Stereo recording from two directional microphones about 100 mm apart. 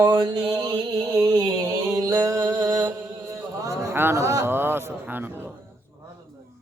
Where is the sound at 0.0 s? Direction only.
45° right (ahead or behind).